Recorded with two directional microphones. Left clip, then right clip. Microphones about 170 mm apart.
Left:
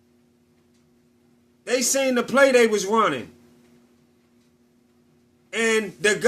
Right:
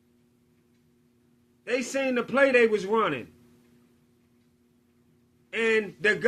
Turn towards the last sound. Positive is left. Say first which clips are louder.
# left 3 dB
turn(degrees=30)  # may be behind; listen again after turning